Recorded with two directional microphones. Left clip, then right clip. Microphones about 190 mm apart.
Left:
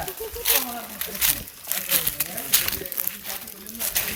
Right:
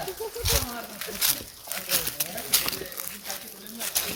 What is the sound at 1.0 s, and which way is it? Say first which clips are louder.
Speech: left 1 dB; 55° left (ahead or behind).